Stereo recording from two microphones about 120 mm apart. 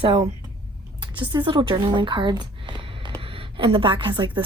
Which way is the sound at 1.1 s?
40° right (ahead or behind).